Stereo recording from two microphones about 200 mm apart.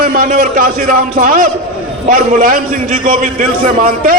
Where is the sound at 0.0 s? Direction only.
40° right (ahead or behind).